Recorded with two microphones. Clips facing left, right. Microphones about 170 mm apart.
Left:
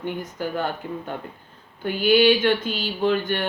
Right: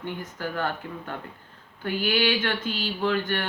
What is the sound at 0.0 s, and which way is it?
Speech, 15° left (ahead or behind).